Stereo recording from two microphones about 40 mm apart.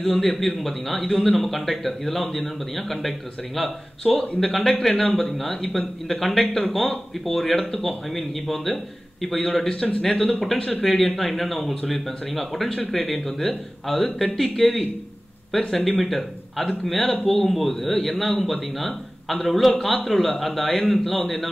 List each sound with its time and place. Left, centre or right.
0.0 s speech: centre
4.8 s speech: centre